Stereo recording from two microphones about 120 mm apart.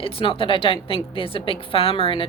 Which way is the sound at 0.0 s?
50° left (ahead or behind).